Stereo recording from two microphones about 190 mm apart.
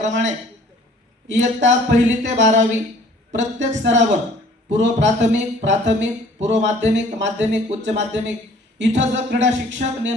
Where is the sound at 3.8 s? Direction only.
70° right (ahead or behind).